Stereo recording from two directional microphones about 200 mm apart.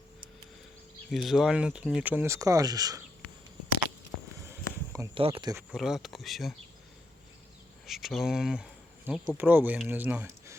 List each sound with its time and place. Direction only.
1.1 s speech: centre (ahead or behind); by 3.0 s 20° right (ahead or behind)
4.4 s a sound: 10° right (ahead or behind)
5.1 s speech: 25° right (ahead or behind)
5.7 s speech: centre (ahead or behind)
7.9 s speech: centre (ahead or behind)